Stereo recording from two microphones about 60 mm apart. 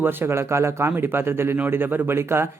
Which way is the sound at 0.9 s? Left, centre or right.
Right.